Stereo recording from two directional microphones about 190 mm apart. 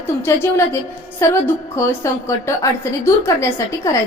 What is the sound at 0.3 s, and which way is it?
A woman's voice, 15° left (ahead or behind).